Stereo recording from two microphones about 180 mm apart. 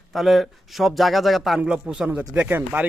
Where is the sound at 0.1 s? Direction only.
Centre (ahead or behind).